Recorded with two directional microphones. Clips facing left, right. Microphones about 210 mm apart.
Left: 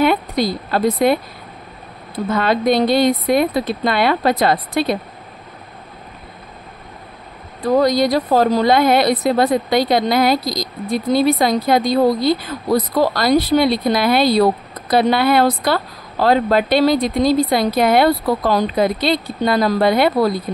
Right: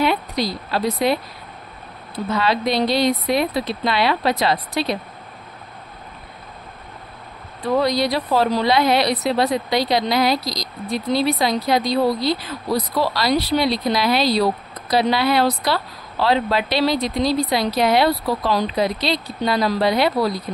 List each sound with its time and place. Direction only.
0.0 s a woman's voice: 50° left (ahead or behind)
7.6 s a woman's voice: 45° left (ahead or behind)